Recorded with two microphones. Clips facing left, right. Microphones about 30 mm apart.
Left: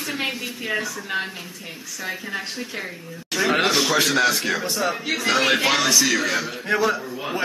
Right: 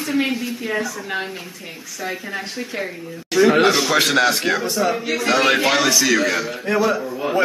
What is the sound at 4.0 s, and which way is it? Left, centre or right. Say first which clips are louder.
Speech: right 3 dB; right.